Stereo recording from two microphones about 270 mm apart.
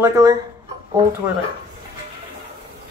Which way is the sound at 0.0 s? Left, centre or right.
Centre.